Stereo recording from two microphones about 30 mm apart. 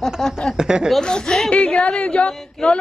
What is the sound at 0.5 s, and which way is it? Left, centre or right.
Speech, right.